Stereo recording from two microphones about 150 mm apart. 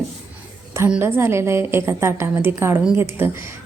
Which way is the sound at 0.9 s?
10° right (ahead or behind).